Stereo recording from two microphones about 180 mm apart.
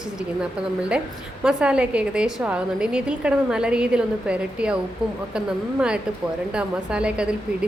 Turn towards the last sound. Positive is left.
turn(degrees=-5)  # may be behind; listen again after turning